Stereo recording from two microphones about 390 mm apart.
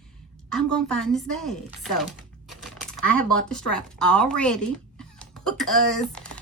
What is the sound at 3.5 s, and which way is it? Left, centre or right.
A woman's voice, centre.